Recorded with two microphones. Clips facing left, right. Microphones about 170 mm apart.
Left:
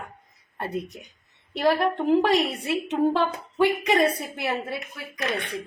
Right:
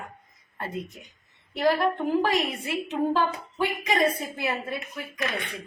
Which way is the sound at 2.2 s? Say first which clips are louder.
Left 3 dB; 75° left (ahead or behind).